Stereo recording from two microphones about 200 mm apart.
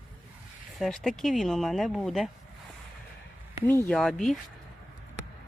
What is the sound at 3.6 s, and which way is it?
Speech, 10° left (ahead or behind).